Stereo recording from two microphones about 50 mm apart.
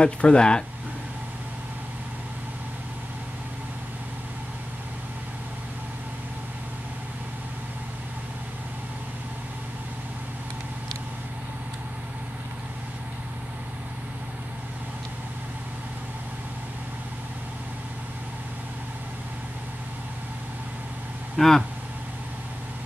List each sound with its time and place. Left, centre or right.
0.0 s speech: left
21.4 s vehicle: centre